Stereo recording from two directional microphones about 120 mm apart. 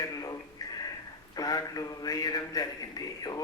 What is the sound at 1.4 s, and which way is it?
A man's voice, 30° left (ahead or behind).